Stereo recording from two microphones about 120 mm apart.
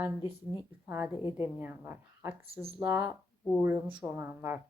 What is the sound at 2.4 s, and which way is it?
Speech, 55° right (ahead or behind).